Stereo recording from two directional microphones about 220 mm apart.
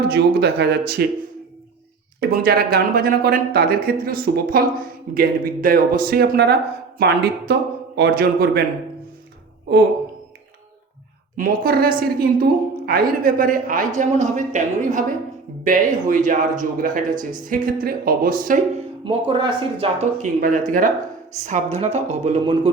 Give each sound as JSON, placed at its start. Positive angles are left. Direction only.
{"t": 0.1, "sound": "speech", "side_deg": -45}
{"t": 2.3, "sound": "a woman's voice", "side_deg": -40}
{"t": 11.3, "sound": "a woman's voice", "side_deg": -40}
{"t": 19.0, "sound": "speech", "side_deg": -20}
{"t": 20.4, "sound": "a woman's voice", "side_deg": -40}